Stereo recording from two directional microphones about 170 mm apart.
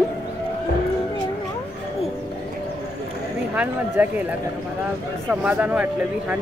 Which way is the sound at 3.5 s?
10° right (ahead or behind).